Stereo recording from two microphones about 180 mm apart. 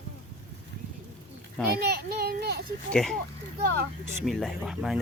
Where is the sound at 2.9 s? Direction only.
Centre (ahead or behind).